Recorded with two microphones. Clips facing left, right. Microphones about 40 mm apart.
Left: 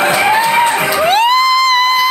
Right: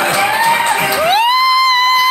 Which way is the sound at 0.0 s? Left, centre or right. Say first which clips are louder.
Left 2 dB; centre.